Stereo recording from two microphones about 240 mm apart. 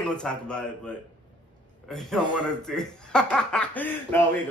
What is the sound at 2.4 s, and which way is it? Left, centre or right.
Speech, centre.